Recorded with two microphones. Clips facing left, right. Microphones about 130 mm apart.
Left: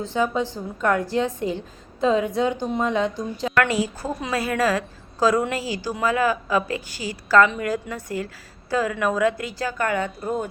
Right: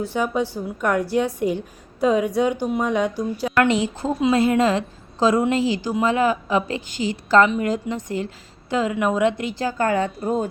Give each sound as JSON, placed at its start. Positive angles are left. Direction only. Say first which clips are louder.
{"t": 0.0, "sound": "a woman's voice", "louder": "right 1 dB", "side_deg": -15}
{"t": 3.6, "sound": "a woman's voice", "louder": "right 3 dB", "side_deg": -20}
{"t": 10.2, "sound": "speech", "louder": "right 3 dB", "side_deg": 0}